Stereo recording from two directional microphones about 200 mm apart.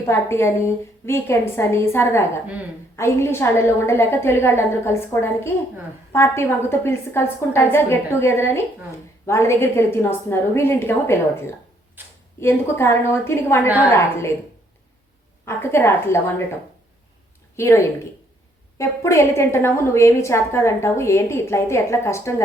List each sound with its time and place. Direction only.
0.1 s a woman's voice: 15° left (ahead or behind)
12.0 s a sound: 10° right (ahead or behind)
12.4 s a woman's voice: 15° left (ahead or behind)
15.4 s a woman's voice: 10° left (ahead or behind)
17.6 s a woman's voice: 15° left (ahead or behind)